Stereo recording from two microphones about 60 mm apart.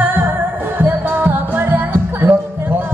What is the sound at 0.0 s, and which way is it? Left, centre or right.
Music, right.